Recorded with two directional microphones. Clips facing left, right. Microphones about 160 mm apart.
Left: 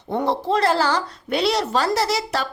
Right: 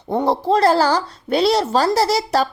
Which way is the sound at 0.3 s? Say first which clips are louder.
Right 5 dB; 35° right (ahead or behind).